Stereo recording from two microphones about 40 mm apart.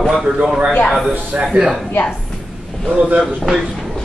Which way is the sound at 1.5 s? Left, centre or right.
Centre.